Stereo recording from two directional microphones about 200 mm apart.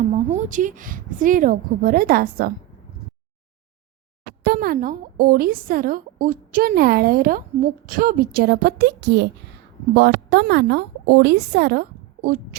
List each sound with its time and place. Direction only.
0.1 s a woman's voice: 35° right (ahead or behind)
4.4 s a woman's voice: 50° right (ahead or behind)